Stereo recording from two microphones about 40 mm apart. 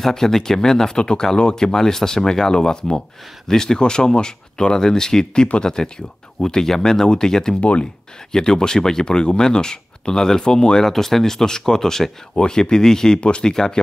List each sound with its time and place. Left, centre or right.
0.0 s speech: centre
7.6 s speech: left
8.3 s speech: centre
10.8 s speech: centre